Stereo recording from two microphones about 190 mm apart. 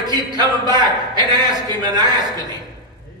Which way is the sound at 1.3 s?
20° right (ahead or behind).